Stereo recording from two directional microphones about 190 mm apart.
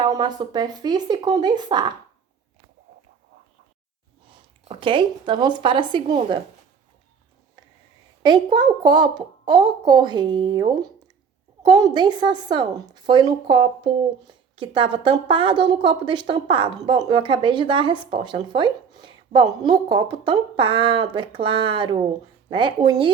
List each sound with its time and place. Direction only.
0.0 s a woman's voice: 20° right (ahead or behind)
4.7 s a woman's voice: 25° right (ahead or behind)
8.2 s a woman's voice: 25° right (ahead or behind)